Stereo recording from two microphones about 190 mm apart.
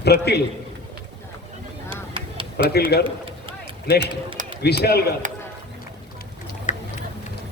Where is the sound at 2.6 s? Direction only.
55° left (ahead or behind).